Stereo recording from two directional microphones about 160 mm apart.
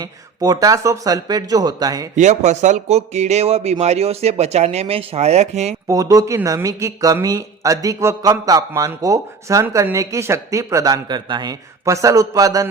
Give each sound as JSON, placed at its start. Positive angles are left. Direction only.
{"t": 0.0, "sound": "a man's voice", "side_deg": -25}
{"t": 2.1, "sound": "speech", "side_deg": -45}
{"t": 5.9, "sound": "a man's voice", "side_deg": -25}